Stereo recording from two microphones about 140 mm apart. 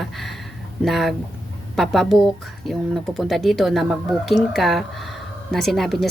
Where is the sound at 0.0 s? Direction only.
Centre (ahead or behind).